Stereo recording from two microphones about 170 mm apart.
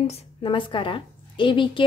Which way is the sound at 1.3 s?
30° left (ahead or behind).